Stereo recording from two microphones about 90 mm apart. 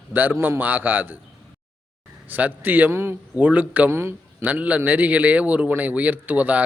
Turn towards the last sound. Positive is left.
turn(degrees=-20)  # may be behind; listen again after turning